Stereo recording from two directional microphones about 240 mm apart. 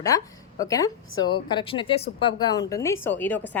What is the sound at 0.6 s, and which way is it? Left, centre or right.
A woman's voice, centre.